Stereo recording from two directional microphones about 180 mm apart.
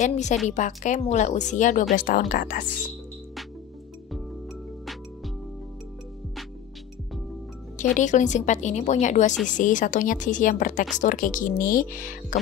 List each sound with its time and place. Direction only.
0.0 s a woman's voice: 40° left (ahead or behind)
7.9 s a woman's voice: 40° left (ahead or behind)